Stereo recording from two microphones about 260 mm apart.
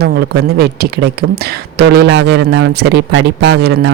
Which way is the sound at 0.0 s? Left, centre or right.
Right.